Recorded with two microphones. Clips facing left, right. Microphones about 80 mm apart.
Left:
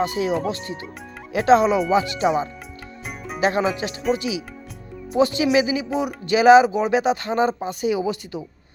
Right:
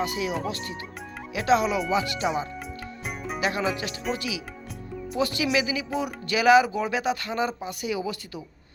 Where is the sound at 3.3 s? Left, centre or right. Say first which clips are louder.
Left 6 dB; left.